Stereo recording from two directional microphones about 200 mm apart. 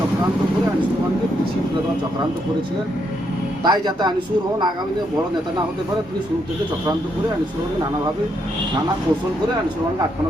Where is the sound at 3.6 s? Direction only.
20° right (ahead or behind).